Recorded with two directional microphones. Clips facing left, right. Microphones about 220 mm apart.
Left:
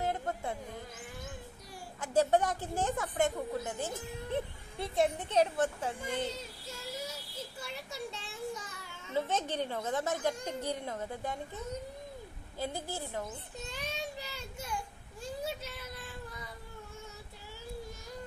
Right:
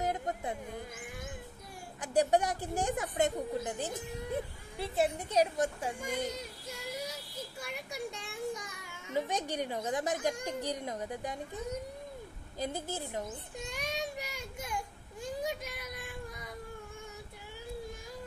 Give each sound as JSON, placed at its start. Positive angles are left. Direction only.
{"t": 0.0, "sound": "music", "side_deg": -15}
{"t": 2.0, "sound": "a woman's voice", "side_deg": -15}
{"t": 4.7, "sound": "a woman's voice", "side_deg": -5}
{"t": 7.9, "sound": "a sound", "side_deg": -15}
{"t": 9.1, "sound": "a woman's voice", "side_deg": -15}
{"t": 12.5, "sound": "a woman's voice", "side_deg": -20}
{"t": 13.7, "sound": "child singing", "side_deg": -15}
{"t": 15.4, "sound": "a sound", "side_deg": -15}